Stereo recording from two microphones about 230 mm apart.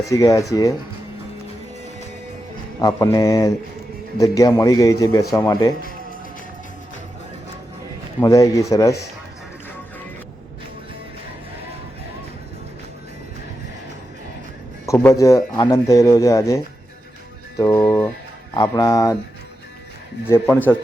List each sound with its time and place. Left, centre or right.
0.1 s speech: centre
2.8 s speech: centre
8.2 s speech: centre
14.8 s speech: centre
17.6 s speech: centre
18.5 s speech: centre
20.2 s speech: centre